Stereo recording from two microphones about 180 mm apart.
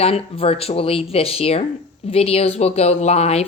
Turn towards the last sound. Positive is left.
turn(degrees=35)  # may be behind; listen again after turning